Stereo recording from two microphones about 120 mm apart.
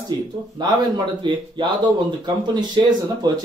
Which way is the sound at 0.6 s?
40° right (ahead or behind).